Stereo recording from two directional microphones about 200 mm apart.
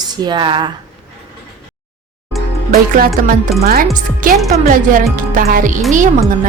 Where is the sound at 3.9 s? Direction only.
45° right (ahead or behind).